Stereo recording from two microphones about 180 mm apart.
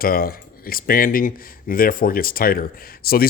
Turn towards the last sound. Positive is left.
turn(degrees=55)  # may be behind; listen again after turning